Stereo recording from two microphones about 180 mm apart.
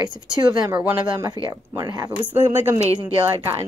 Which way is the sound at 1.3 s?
25° right (ahead or behind).